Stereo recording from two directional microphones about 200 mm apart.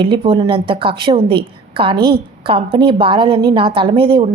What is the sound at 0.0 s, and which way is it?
A woman's voice, 25° right (ahead or behind).